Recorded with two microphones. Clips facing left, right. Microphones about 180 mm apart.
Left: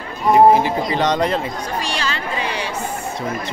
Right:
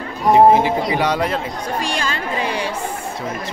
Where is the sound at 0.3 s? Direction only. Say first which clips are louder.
Right 1 dB; 20° right (ahead or behind).